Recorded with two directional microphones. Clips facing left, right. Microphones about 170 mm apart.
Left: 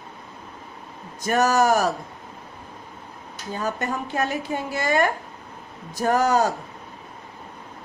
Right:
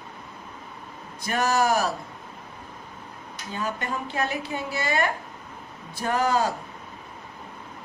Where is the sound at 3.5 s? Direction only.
40° left (ahead or behind).